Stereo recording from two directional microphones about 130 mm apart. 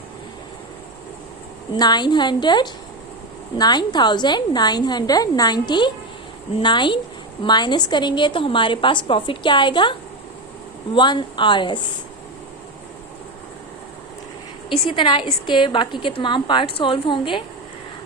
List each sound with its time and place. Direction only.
1.7 s a woman's voice: 30° left (ahead or behind)
10.9 s a woman's voice: 35° left (ahead or behind)
14.7 s a woman's voice: 40° left (ahead or behind)